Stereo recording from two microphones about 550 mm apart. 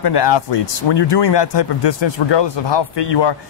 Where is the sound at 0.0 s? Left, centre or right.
Left.